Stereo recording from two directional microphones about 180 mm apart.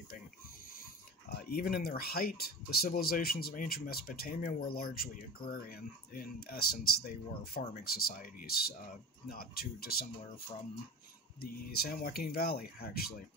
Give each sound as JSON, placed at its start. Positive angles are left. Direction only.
{"t": 1.5, "sound": "speech", "side_deg": 55}
{"t": 11.4, "sound": "speech", "side_deg": 55}